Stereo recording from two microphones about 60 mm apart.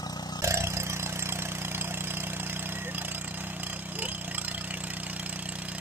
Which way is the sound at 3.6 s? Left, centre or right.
Right.